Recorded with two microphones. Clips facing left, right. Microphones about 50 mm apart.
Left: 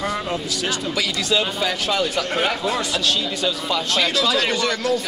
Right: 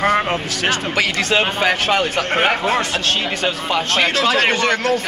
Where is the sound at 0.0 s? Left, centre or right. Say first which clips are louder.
Right 7 dB; right.